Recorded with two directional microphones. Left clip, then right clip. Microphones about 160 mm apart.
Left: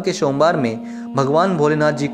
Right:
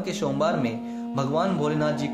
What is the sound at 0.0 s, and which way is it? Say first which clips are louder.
Speech: left 9 dB; 55° left (ahead or behind).